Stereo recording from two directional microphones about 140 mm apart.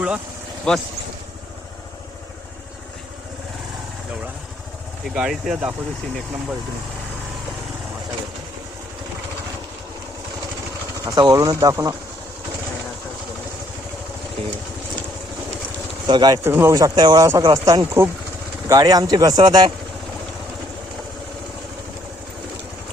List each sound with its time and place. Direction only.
0.7 s speech: 5° left (ahead or behind)
5.0 s speech: 5° right (ahead or behind)
11.0 s speech: 25° right (ahead or behind)
16.0 s speech: 30° right (ahead or behind)
16.4 s speech: 15° right (ahead or behind)